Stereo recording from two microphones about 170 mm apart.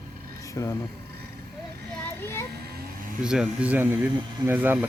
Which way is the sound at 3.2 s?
5° right (ahead or behind).